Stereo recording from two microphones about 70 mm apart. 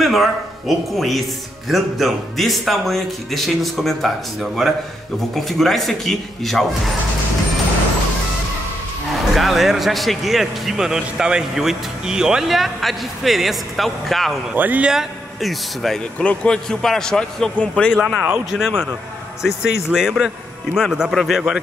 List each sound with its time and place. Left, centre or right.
0.0 s speech: centre
9.1 s speech: centre
14.5 s a man's voice: right
14.9 s a man's voice: centre
18.5 s speech: centre